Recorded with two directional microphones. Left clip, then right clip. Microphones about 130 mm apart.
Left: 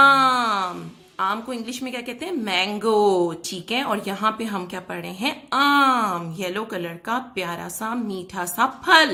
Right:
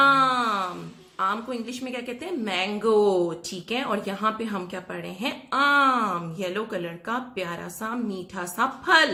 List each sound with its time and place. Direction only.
0.0 s wail: 35° left (ahead or behind)
1.2 s a woman's voice: 35° left (ahead or behind)